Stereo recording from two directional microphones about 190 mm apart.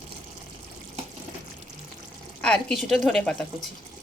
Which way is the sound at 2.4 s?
5° left (ahead or behind).